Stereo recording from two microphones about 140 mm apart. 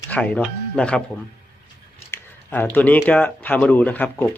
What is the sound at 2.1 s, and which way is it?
A man's voice, 15° left (ahead or behind).